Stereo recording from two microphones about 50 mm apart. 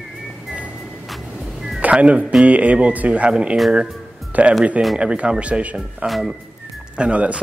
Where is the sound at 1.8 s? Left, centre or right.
Right.